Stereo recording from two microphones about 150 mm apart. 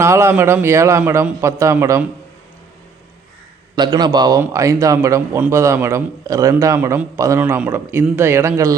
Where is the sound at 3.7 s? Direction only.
30° right (ahead or behind).